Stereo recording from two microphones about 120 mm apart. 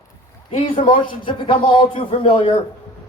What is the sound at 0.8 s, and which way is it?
A man's voice, 45° left (ahead or behind).